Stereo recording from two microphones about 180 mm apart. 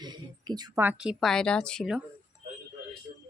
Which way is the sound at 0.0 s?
25° right (ahead or behind).